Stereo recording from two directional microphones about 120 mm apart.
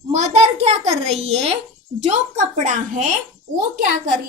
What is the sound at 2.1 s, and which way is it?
A woman's voice, 90° right.